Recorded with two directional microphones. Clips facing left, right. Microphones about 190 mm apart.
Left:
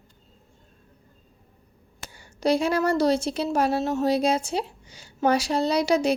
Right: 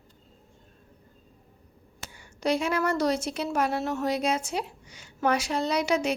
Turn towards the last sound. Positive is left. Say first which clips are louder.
# left 4 dB
turn(degrees=35)  # may be behind; listen again after turning